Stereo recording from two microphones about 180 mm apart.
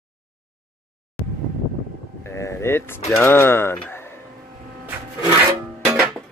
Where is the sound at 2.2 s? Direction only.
15° left (ahead or behind).